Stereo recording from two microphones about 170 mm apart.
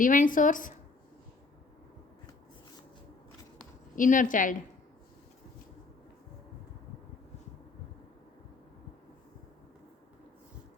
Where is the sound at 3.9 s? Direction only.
50° left (ahead or behind).